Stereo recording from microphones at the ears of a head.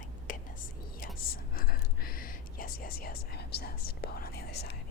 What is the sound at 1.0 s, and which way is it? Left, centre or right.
Whispering, left.